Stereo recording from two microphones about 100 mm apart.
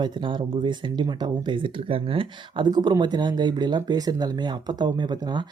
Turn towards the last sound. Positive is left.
turn(degrees=-45)  # may be behind; listen again after turning